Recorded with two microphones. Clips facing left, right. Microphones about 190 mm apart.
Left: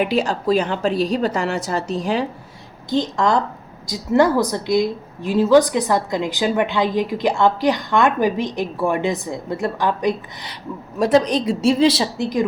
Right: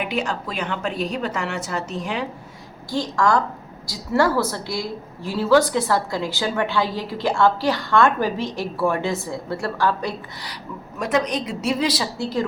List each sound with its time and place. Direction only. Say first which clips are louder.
0.0 s a woman's voice: left 6 dB; 35° left (ahead or behind)
2.9 s a woman's voice: left 2 dB; 20° left (ahead or behind)
11.0 s a woman's voice: left 6 dB; 30° left (ahead or behind)